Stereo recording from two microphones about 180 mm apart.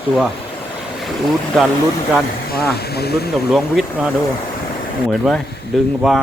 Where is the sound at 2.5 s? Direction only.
60° left (ahead or behind).